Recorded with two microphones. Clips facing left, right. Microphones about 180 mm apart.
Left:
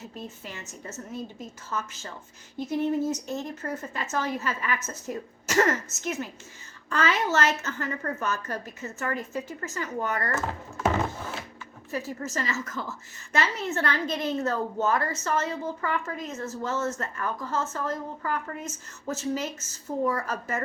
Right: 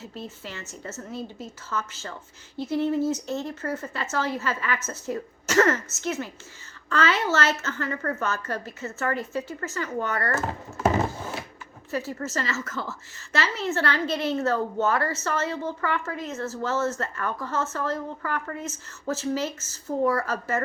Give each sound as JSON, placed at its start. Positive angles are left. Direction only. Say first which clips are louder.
{"t": 0.0, "sound": "a woman's voice", "louder": "right 2 dB", "side_deg": 15}
{"t": 10.8, "sound": "a sound", "louder": "right 3 dB", "side_deg": -10}
{"t": 11.9, "sound": "a woman's voice", "louder": "right 2 dB", "side_deg": 15}